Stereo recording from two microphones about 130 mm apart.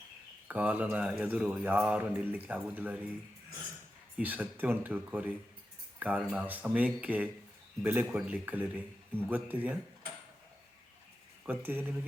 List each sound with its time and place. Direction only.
0.4 s speech: 10° right (ahead or behind)
4.2 s speech: 15° right (ahead or behind)
11.4 s speech: 15° right (ahead or behind)